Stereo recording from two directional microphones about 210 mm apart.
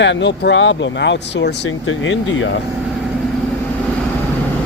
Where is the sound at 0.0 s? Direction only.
55° left (ahead or behind).